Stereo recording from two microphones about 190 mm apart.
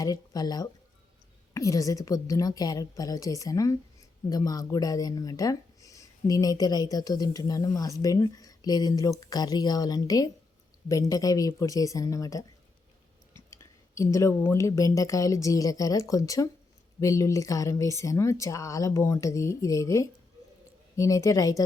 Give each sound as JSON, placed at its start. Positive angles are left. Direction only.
{"t": 0.0, "sound": "speech", "side_deg": 20}
{"t": 13.5, "sound": "speech", "side_deg": 15}